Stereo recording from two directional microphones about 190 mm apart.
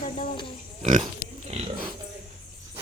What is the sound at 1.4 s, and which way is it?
Speech, 35° right (ahead or behind).